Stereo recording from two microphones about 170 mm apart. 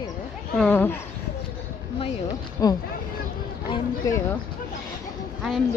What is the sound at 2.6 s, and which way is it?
Speech, 20° left (ahead or behind).